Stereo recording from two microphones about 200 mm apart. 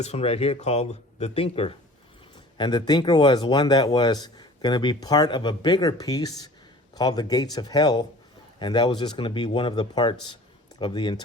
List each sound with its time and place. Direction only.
0.0 s speech: 30° left (ahead or behind)